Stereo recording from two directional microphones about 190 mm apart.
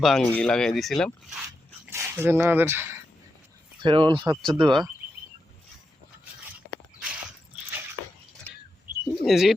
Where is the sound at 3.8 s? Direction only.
25° right (ahead or behind).